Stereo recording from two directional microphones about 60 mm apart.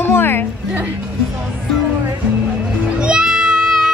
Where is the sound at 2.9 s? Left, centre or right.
Centre.